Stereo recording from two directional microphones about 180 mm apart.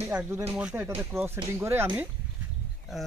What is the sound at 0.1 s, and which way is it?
Speech, 10° right (ahead or behind).